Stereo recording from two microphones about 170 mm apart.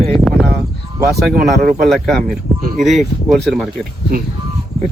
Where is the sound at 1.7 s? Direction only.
Centre (ahead or behind).